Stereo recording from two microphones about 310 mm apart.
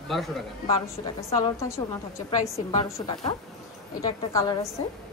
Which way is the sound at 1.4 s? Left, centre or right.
Centre.